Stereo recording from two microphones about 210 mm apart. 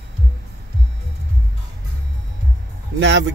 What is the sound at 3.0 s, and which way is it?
Speech, 60° right (ahead or behind).